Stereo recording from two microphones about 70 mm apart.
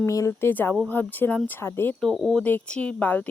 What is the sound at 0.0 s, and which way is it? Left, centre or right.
Speech, left.